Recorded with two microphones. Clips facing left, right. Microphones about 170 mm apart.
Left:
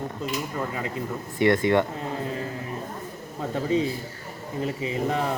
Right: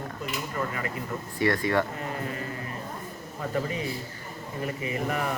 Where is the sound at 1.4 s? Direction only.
20° left (ahead or behind).